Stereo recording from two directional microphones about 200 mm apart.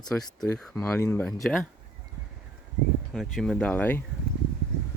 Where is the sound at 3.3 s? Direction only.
Centre (ahead or behind).